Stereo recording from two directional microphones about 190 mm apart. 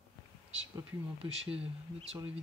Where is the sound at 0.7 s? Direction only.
30° right (ahead or behind).